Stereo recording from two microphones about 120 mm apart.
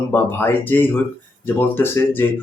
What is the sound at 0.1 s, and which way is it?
Speech, 15° left (ahead or behind).